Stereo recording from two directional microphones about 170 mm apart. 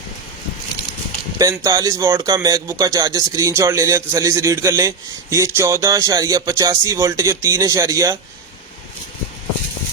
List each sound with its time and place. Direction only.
1.4 s speech: 20° right (ahead or behind)